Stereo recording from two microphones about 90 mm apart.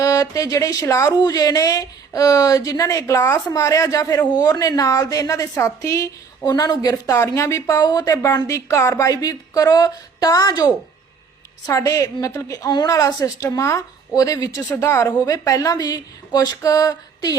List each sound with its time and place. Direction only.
0.0 s a woman's voice: 40° left (ahead or behind)
4.4 s a woman's voice: 45° left (ahead or behind)
6.5 s speech: 45° left (ahead or behind)
6.9 s a woman's voice: 35° left (ahead or behind)
7.8 s speech: 50° left (ahead or behind)
8.2 s a woman's voice: 35° left (ahead or behind)